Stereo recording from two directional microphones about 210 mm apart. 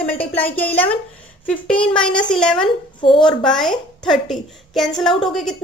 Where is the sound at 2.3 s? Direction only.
5° left (ahead or behind).